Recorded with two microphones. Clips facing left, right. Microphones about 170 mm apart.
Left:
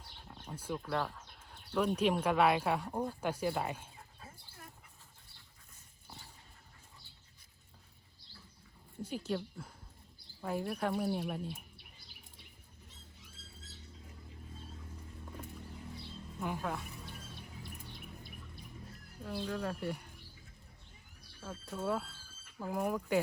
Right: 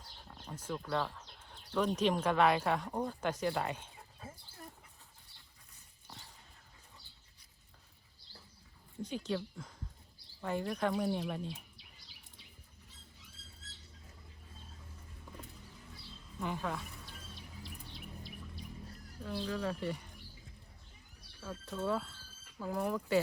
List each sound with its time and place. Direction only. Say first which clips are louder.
0.4 s speech: left 1 dB; 10° left (ahead or behind)
9.0 s speech: even; 5° left (ahead or behind)
16.4 s speech: even; 5° left (ahead or behind)
17.1 s music: left 3 dB; 55° left (ahead or behind)
19.2 s speech: right 1 dB; 5° left (ahead or behind)
21.8 s speech: even; 10° left (ahead or behind)